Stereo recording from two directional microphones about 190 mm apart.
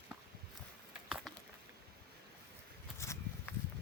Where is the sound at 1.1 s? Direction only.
5° right (ahead or behind).